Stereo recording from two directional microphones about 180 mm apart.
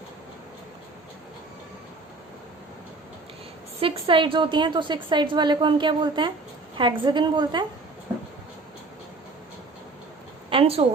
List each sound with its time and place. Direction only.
3.8 s a woman's voice: 30° right (ahead or behind)
10.5 s speech: 35° right (ahead or behind)